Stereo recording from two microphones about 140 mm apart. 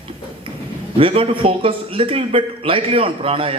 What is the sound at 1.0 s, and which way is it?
A man's voice, 40° right (ahead or behind).